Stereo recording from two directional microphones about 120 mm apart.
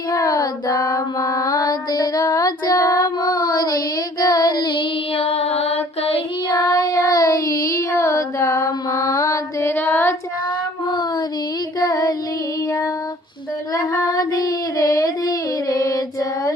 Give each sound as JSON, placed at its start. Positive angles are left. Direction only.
{"t": 0.1, "sound": "child singing", "side_deg": 30}
{"t": 5.2, "sound": "music", "side_deg": 60}
{"t": 6.5, "sound": "child singing", "side_deg": 30}
{"t": 11.8, "sound": "child singing", "side_deg": 30}
{"t": 13.9, "sound": "child singing", "side_deg": 30}